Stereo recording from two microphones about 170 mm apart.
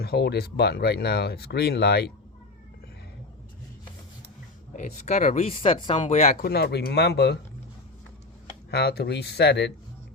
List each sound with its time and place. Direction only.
0.0 s speech: 75° left (ahead or behind)
4.7 s speech: 45° left (ahead or behind)
6.0 s speech: 40° left (ahead or behind)
6.5 s speech: 75° left (ahead or behind)
8.7 s speech: 70° left (ahead or behind)